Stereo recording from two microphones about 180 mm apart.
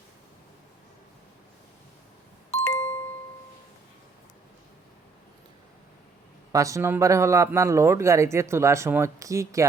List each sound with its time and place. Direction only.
2.5 s ding-dong: 15° left (ahead or behind)
6.5 s speech: 20° right (ahead or behind)